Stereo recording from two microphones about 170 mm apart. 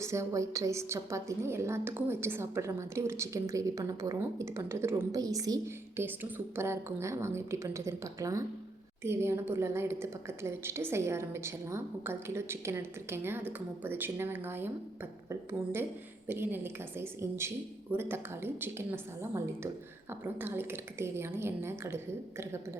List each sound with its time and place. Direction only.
0.0 s a woman's voice: 15° right (ahead or behind)